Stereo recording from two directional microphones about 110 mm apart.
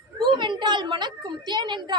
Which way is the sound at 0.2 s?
45° right (ahead or behind).